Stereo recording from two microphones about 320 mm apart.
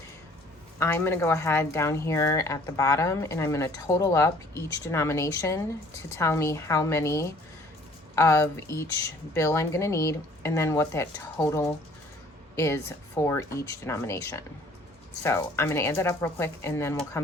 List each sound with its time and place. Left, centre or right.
0.8 s a woman's voice: centre